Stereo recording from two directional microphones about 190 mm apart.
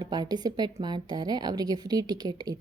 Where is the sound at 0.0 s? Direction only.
20° right (ahead or behind).